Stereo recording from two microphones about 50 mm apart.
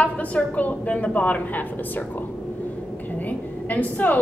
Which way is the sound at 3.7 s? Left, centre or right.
Left.